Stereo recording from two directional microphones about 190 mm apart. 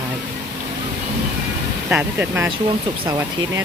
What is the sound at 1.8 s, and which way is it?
Speech, 10° right (ahead or behind).